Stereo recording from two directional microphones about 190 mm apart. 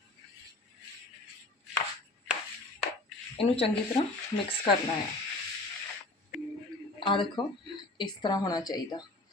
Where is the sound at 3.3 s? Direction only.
30° left (ahead or behind).